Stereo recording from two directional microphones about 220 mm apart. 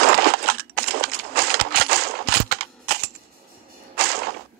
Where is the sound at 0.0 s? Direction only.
45° right (ahead or behind).